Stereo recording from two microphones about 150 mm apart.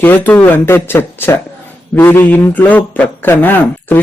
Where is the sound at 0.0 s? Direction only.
10° left (ahead or behind).